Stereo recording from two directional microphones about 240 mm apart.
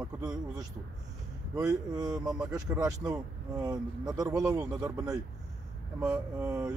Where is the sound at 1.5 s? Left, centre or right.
Centre.